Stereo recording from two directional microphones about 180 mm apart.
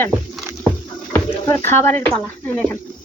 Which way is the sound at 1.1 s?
15° left (ahead or behind).